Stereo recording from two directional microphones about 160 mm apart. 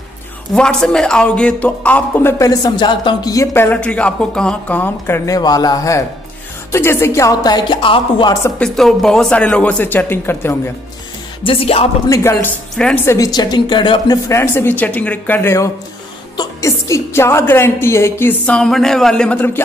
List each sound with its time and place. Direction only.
0.6 s a woman's voice: 5° left (ahead or behind); by 8.5 s 25° left (ahead or behind)
8.5 s speech: centre (ahead or behind)
11.4 s music: 35° left (ahead or behind)
12.1 s speech: 15° left (ahead or behind)
13.0 s a woman's voice: 20° left (ahead or behind)
14.3 s a woman's voice: 15° left (ahead or behind)